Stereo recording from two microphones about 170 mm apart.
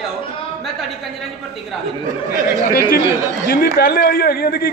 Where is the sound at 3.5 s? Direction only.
60° left (ahead or behind).